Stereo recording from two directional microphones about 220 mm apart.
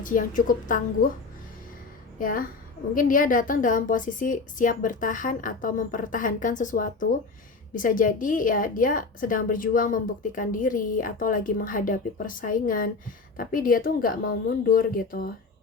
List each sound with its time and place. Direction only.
0.0 s a woman's voice: 35° left (ahead or behind)
2.1 s a woman's voice: 40° left (ahead or behind)